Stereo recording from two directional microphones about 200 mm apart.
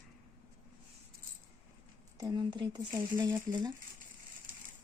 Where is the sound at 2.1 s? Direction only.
20° right (ahead or behind).